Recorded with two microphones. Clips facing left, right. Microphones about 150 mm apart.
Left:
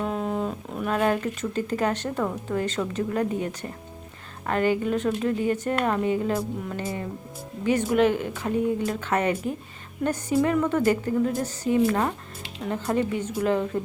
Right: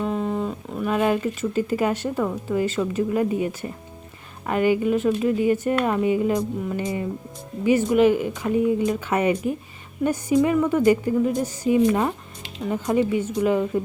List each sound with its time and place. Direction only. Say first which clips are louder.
0.0 s speech: right 2 dB; centre (ahead or behind)